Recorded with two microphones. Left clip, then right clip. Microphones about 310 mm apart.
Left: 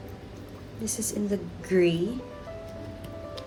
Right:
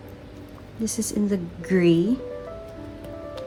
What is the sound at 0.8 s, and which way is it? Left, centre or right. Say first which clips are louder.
A woman's voice: right 5 dB; right.